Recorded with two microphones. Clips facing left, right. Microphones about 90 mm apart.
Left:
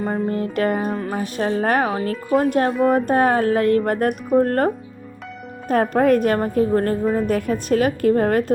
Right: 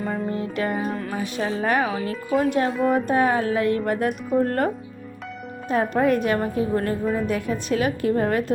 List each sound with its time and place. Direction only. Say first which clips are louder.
0.0 s a woman's voice: left 4 dB; 45° left (ahead or behind)
0.9 s a woman's voice: left 3 dB; 35° left (ahead or behind)